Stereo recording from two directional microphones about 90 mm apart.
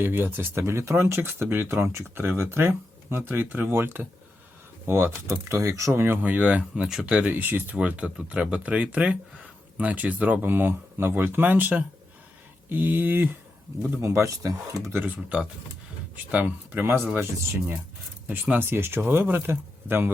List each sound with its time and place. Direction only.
0.0 s speech: 25° right (ahead or behind)
14.0 s speech: 35° right (ahead or behind)
14.9 s speech: 20° right (ahead or behind)